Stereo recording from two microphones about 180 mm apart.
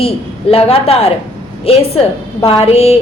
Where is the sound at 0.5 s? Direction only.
35° left (ahead or behind).